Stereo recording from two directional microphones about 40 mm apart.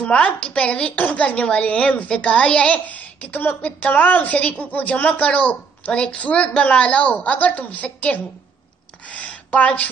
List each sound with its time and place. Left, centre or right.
0.0 s a woman's voice: left
0.9 s a woman's voice: left
2.7 s a child's voice: left
9.0 s a sound: left